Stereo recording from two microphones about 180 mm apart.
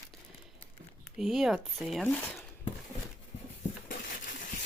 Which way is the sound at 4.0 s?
45° left (ahead or behind).